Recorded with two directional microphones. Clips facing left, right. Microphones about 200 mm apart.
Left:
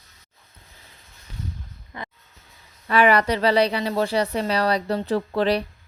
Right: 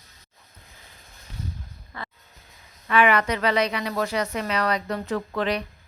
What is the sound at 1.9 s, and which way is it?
Music, 20° left (ahead or behind).